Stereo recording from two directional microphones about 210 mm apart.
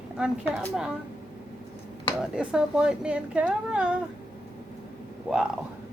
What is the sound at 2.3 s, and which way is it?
A woman's voice, 5° right (ahead or behind).